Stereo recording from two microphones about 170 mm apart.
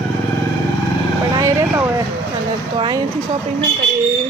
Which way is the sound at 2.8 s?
25° right (ahead or behind).